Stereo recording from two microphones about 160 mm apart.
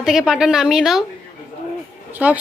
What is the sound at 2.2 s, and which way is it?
Speech, 10° right (ahead or behind).